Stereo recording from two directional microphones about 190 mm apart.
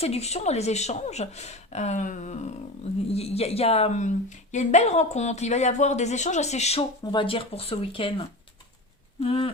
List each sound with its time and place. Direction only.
0.0 s a woman's voice: 35° left (ahead or behind)
7.0 s speech: 25° left (ahead or behind)
9.2 s speech: 30° left (ahead or behind)